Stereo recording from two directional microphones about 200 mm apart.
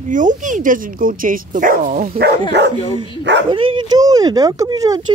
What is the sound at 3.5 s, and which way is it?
Speech, 20° right (ahead or behind).